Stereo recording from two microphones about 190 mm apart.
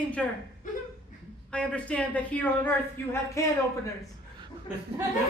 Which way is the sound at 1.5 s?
5° left (ahead or behind).